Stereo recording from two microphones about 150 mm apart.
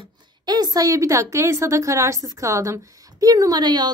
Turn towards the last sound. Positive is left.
turn(degrees=-25)  # may be behind; listen again after turning